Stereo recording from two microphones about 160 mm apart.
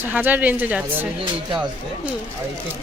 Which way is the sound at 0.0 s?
10° right (ahead or behind).